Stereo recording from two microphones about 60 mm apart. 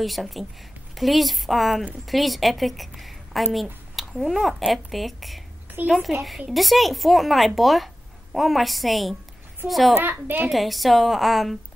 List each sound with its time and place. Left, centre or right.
0.0 s speech: centre
10.0 s a child's voice: right
10.5 s speech: centre